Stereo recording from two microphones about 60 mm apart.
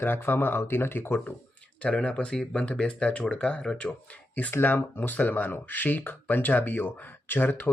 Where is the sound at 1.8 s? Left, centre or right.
Centre.